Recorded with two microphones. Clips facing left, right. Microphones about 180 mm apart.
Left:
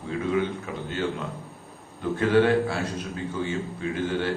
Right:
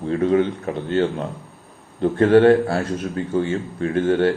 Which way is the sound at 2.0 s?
55° right (ahead or behind).